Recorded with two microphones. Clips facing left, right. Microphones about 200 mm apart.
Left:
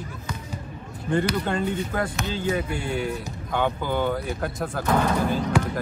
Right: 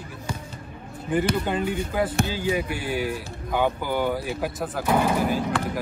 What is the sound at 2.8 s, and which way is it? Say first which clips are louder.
Speech: even; 25° left (ahead or behind).